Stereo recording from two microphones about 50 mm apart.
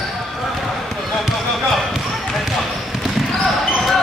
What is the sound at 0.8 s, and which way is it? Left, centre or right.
Basketball bounce, centre.